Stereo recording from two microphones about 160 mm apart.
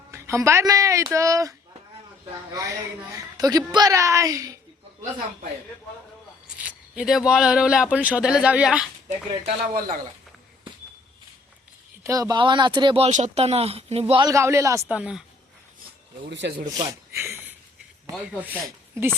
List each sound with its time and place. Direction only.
0.1 s a woman's voice: 15° right (ahead or behind)
6.6 s speech: 10° right (ahead or behind)
9.5 s speech: 65° right (ahead or behind)
12.0 s a woman's voice: 20° right (ahead or behind)
13.1 s speech: 50° right (ahead or behind)
14.1 s a woman's voice: 25° right (ahead or behind)
14.9 s speech: 5° right (ahead or behind)
16.6 s speech: 25° right (ahead or behind)
18.4 s speech: 15° right (ahead or behind)